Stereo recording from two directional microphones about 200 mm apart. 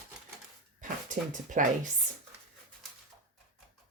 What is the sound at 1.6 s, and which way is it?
Speech, 40° right (ahead or behind).